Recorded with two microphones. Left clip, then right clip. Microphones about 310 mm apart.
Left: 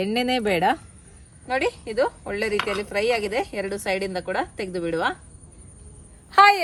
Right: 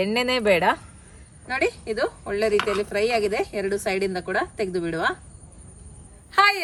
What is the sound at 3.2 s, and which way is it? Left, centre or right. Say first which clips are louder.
A woman's voice: right 1 dB; centre.